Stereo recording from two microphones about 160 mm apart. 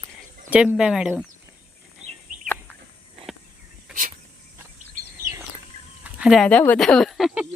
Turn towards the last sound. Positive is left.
turn(degrees=-5)  # may be behind; listen again after turning